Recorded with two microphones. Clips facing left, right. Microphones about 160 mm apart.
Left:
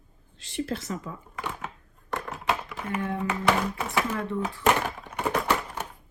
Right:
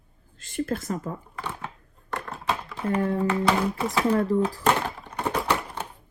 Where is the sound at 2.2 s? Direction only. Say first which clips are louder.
Even; 10° left (ahead or behind).